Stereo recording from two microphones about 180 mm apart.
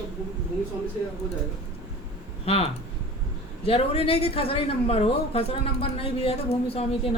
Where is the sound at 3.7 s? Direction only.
30° left (ahead or behind).